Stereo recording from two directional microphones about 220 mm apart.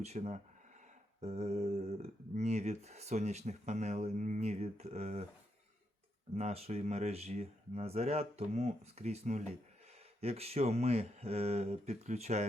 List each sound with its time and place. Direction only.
0.0 s speech: 30° right (ahead or behind)
6.3 s speech: 30° right (ahead or behind)